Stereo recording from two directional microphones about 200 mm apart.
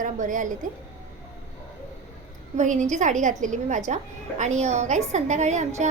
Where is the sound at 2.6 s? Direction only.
40° right (ahead or behind).